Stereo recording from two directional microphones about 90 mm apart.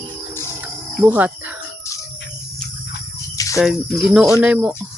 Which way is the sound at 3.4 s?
40° left (ahead or behind).